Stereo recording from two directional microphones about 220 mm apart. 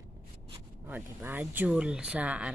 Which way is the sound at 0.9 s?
10° right (ahead or behind).